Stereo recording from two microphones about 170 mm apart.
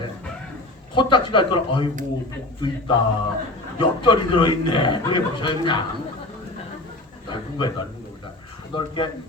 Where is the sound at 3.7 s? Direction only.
30° left (ahead or behind).